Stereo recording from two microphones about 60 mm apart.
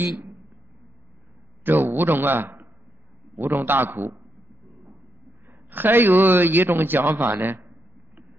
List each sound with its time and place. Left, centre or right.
1.6 s a man's voice: right
5.5 s a man's voice: right